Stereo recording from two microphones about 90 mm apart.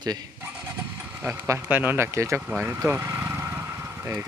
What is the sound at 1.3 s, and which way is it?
A man's voice, 25° right (ahead or behind).